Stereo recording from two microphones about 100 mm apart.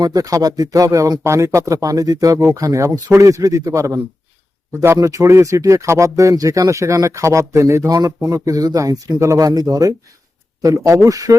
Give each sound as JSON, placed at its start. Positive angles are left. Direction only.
{"t": 0.0, "sound": "speech", "side_deg": -40}
{"t": 4.9, "sound": "speech", "side_deg": -30}
{"t": 7.9, "sound": "speech", "side_deg": -40}